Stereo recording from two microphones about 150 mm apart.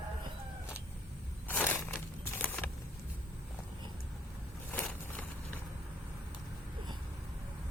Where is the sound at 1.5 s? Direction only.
15° left (ahead or behind).